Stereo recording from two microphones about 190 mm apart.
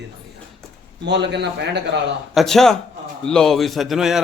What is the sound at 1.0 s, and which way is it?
Speech, 65° right (ahead or behind).